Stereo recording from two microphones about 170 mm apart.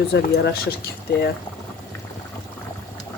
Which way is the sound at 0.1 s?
75° left (ahead or behind).